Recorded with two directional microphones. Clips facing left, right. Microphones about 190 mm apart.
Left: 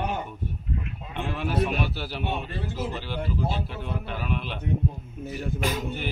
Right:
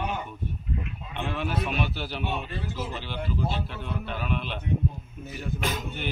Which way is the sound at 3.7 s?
5° left (ahead or behind).